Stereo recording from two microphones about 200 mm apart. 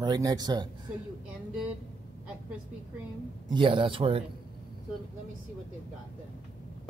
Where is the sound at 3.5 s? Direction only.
25° right (ahead or behind).